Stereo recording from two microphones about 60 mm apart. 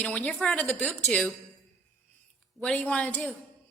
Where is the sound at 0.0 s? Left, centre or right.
Left.